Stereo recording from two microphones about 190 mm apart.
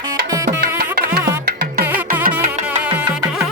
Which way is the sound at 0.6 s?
55° right (ahead or behind).